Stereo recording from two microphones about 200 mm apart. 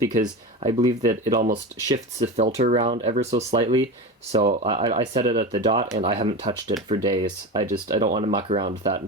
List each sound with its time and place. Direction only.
0.2 s speech: 25° right (ahead or behind)
2.1 s speech: 35° right (ahead or behind)
7.7 s speech: 40° right (ahead or behind)
8.4 s speech: 25° right (ahead or behind)